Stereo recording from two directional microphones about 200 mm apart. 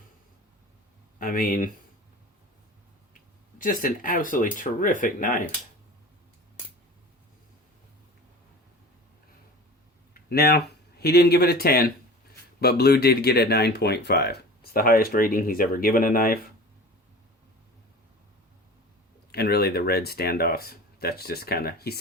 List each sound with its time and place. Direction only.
1.2 s speech: 45° left (ahead or behind)
3.6 s speech: 45° left (ahead or behind)
10.2 s speech: 50° left (ahead or behind)
19.3 s speech: 50° left (ahead or behind)